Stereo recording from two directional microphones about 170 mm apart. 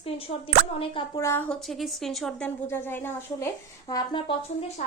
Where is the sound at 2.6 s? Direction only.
15° left (ahead or behind).